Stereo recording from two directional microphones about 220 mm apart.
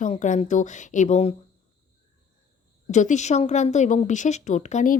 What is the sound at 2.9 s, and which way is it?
A woman's voice, 35° left (ahead or behind).